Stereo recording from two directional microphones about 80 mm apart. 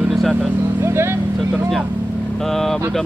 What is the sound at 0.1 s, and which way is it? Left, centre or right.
Vehicle, centre.